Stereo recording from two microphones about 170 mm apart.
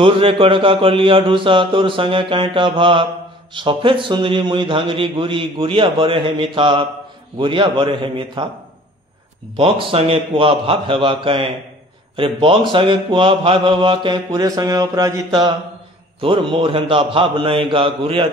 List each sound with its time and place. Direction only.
0.0 s mantra: 30° right (ahead or behind)
3.5 s speech: 30° right (ahead or behind)
9.6 s mantra: 30° right (ahead or behind)
12.2 s speech: 30° right (ahead or behind)
16.2 s mantra: 30° right (ahead or behind)